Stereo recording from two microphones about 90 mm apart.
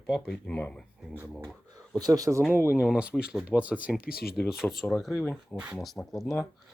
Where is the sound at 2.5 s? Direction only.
25° right (ahead or behind).